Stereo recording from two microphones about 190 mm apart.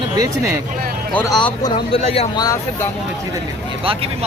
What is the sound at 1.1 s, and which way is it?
Speech, 20° left (ahead or behind).